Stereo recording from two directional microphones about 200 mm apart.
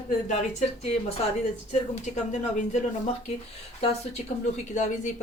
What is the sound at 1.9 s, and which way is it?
Speech, 35° left (ahead or behind).